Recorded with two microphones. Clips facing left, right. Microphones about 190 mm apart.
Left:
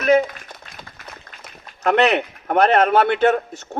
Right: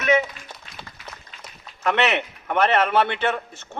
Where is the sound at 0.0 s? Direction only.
35° left (ahead or behind).